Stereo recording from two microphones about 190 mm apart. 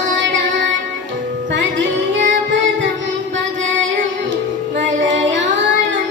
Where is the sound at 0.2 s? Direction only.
75° right (ahead or behind).